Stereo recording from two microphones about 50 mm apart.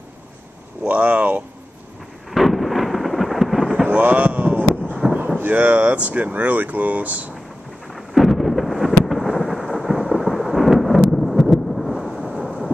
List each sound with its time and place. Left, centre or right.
0.8 s speech: right
2.3 s thunder: centre
3.8 s a sound: right
4.9 s fireworks: centre
5.4 s speech: right
7.9 s thunder: centre